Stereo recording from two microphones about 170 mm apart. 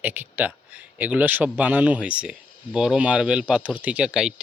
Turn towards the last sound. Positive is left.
turn(degrees=-5)  # may be behind; listen again after turning